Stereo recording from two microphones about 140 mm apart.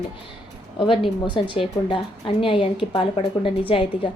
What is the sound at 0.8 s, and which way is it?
A woman's voice, 35° left (ahead or behind).